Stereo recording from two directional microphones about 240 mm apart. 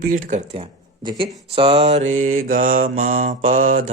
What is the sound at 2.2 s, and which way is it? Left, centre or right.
Mantra, right.